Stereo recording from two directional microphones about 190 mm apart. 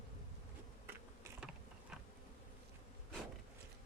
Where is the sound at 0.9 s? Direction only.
10° right (ahead or behind).